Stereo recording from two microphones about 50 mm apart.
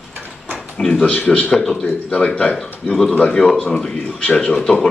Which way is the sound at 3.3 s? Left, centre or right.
Centre.